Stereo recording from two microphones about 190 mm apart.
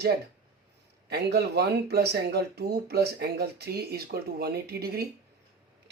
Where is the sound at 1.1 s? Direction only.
60° right (ahead or behind).